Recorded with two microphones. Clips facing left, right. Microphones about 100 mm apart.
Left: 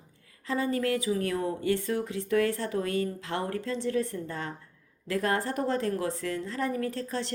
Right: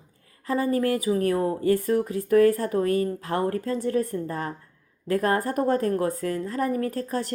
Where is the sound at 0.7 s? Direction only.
35° right (ahead or behind).